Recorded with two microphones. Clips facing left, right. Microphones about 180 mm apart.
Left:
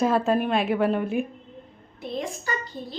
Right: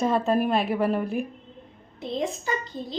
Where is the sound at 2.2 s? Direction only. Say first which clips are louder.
Right 3 dB; 20° right (ahead or behind).